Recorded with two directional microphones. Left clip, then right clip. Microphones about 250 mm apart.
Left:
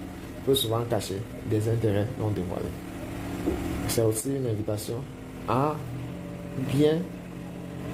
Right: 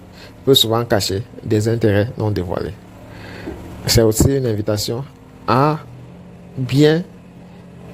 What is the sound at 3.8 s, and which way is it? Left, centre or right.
Speech, right.